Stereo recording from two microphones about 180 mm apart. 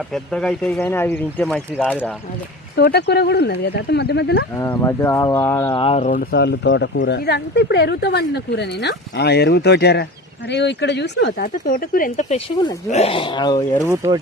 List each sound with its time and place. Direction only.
0.1 s speech: 5° left (ahead or behind)
1.5 s speech: 5° right (ahead or behind)
2.7 s speech: 65° left (ahead or behind)
4.5 s speech: 15° left (ahead or behind)
5.7 s speech: 30° left (ahead or behind)
6.1 s speech: 55° left (ahead or behind)
12.9 s speech: 35° left (ahead or behind)
13.9 s speech: 20° right (ahead or behind)